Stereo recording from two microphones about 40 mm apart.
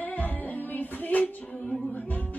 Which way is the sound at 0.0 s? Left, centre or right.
Left.